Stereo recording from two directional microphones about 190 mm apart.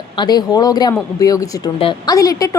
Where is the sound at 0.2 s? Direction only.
20° left (ahead or behind).